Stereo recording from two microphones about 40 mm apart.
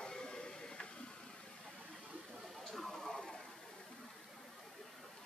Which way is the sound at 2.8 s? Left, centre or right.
Centre.